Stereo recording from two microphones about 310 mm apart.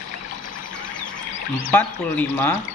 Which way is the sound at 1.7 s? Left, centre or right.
Centre.